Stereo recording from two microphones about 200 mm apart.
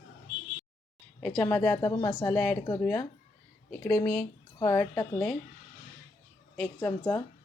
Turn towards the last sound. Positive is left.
turn(degrees=10)  # may be behind; listen again after turning